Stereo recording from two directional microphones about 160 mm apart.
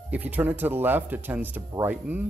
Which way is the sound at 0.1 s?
10° right (ahead or behind).